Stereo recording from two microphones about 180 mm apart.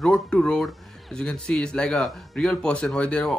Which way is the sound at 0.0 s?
5° left (ahead or behind).